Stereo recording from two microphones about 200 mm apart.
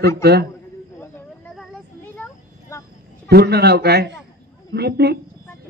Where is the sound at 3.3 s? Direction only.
55° right (ahead or behind).